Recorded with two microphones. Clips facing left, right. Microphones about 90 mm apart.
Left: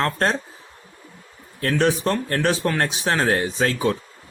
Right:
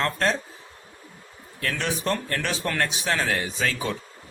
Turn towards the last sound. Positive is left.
turn(degrees=40)  # may be behind; listen again after turning